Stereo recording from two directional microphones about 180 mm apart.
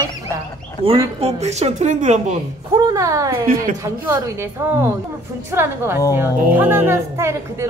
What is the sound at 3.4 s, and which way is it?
Speech, 50° right (ahead or behind).